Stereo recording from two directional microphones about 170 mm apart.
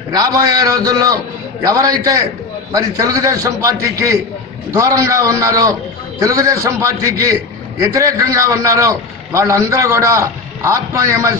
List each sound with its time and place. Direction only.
0.1 s a man's voice: 20° right (ahead or behind)
4.6 s a man's voice: 20° right (ahead or behind)